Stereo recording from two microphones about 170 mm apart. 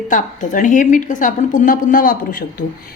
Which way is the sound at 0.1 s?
50° left (ahead or behind).